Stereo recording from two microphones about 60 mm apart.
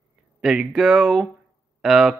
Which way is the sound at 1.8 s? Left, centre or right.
Centre.